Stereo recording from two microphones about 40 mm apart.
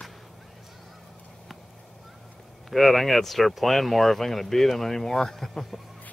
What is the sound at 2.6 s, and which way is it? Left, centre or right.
Speech, centre.